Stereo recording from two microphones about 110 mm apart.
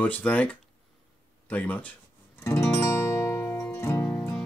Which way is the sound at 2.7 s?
20° left (ahead or behind).